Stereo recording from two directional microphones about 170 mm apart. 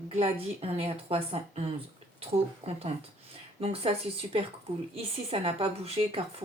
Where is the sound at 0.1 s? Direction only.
35° right (ahead or behind).